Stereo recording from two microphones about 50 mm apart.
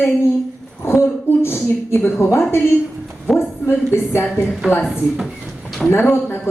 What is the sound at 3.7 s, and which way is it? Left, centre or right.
Speech, left.